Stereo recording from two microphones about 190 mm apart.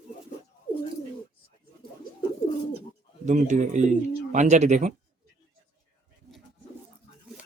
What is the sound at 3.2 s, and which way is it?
Speech, 40° right (ahead or behind).